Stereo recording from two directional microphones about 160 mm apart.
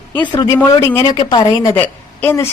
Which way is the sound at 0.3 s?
30° left (ahead or behind).